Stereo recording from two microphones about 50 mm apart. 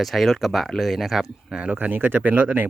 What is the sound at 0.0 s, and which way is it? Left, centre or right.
Speech, centre.